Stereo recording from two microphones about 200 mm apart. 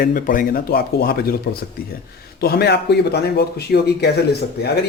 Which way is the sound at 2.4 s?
50° left (ahead or behind).